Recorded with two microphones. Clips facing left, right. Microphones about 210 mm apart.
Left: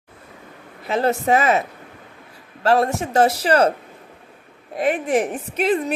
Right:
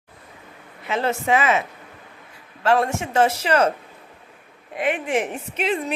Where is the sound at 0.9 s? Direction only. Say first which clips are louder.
Left 3 dB; 40° left (ahead or behind).